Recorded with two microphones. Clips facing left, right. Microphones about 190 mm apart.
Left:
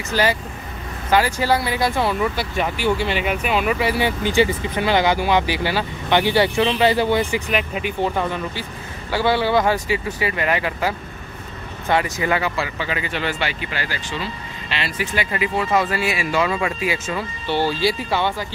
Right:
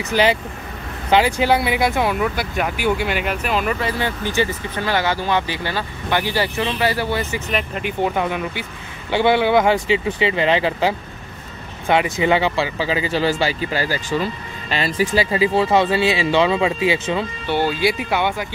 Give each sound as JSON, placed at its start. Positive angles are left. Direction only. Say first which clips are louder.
{"t": 0.1, "sound": "speech", "louder": "right 2 dB", "side_deg": -20}
{"t": 2.2, "sound": "speech", "louder": "even", "side_deg": 0}
{"t": 8.0, "sound": "speech", "louder": "right 2 dB", "side_deg": -10}